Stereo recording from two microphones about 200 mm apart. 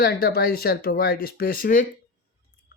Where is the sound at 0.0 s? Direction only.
50° left (ahead or behind).